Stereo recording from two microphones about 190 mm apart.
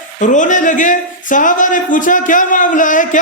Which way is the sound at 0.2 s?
40° left (ahead or behind).